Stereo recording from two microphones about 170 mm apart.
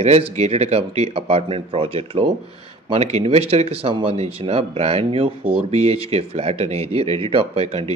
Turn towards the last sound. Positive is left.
turn(degrees=-35)  # may be behind; listen again after turning